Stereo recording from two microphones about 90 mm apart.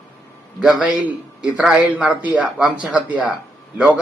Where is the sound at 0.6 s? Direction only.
5° right (ahead or behind).